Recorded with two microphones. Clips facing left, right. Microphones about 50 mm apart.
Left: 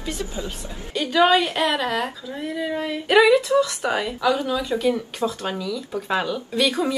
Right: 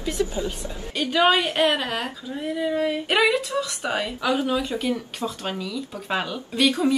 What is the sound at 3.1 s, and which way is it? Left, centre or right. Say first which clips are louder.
A woman's voice: left 9 dB; centre.